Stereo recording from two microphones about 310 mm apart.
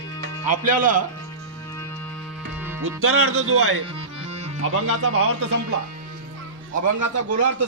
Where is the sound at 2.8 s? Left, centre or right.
Right.